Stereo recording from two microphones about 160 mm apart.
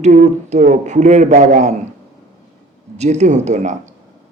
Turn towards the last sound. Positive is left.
turn(degrees=-45)  # may be behind; listen again after turning